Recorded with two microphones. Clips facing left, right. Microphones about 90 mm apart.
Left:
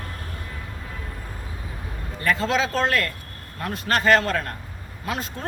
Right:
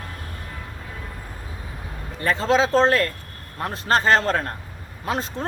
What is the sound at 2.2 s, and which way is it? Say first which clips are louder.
A man's voice: right 3 dB; 30° right (ahead or behind).